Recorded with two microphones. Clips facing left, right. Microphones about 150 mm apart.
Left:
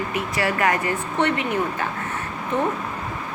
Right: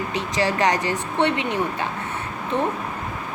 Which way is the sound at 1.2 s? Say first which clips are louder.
Right 1 dB; 20° right (ahead or behind).